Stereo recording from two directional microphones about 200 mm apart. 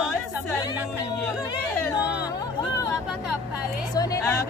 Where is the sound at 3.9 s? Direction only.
20° left (ahead or behind).